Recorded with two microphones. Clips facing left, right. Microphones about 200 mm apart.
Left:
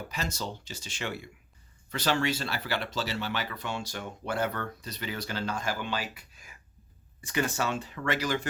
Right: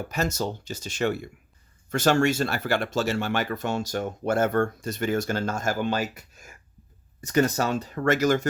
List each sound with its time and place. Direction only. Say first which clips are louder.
0.1 s speech: right 10 dB; 45° right (ahead or behind)